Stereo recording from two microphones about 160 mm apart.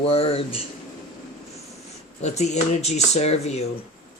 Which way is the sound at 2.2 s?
45° left (ahead or behind).